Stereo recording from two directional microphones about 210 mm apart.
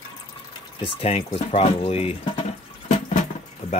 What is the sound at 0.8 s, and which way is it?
Speech, 25° left (ahead or behind).